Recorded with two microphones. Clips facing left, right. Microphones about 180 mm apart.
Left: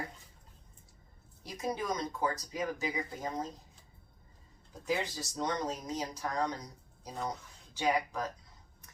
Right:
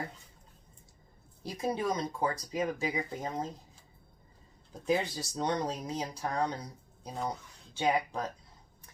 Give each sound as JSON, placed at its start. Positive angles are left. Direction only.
{"t": 1.5, "sound": "speech", "side_deg": -30}
{"t": 4.9, "sound": "speech", "side_deg": -30}